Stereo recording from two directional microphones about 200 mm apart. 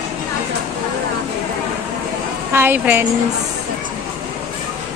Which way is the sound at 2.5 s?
10° right (ahead or behind).